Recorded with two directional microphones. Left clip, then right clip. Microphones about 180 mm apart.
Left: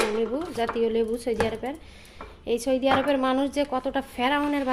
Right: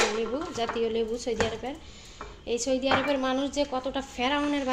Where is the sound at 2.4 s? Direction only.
30° left (ahead or behind).